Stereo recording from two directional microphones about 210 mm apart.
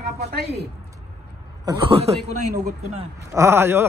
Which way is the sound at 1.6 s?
25° right (ahead or behind).